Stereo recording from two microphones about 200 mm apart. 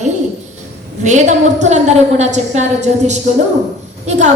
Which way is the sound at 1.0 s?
35° right (ahead or behind).